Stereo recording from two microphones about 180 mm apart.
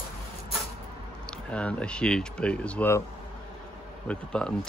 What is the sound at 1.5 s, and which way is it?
Speech, 5° left (ahead or behind).